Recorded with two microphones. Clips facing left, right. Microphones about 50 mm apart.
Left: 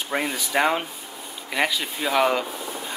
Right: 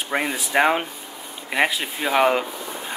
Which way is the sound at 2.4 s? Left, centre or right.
Centre.